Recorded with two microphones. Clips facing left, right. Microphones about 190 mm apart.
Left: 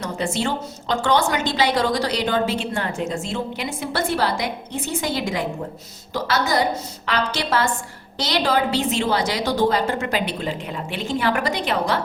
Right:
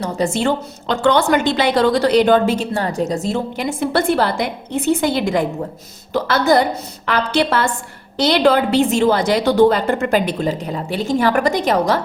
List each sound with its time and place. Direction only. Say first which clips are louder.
0.3 s a woman's voice: right 6 dB; 60° right (ahead or behind)